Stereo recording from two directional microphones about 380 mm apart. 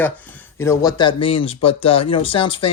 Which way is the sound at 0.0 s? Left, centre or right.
Centre.